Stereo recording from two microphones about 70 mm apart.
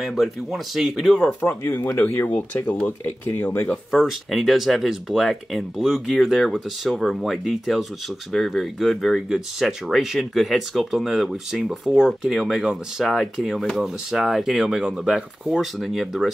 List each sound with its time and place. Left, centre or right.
0.0 s speech: centre
1.5 s speech: left
3.9 s speech: centre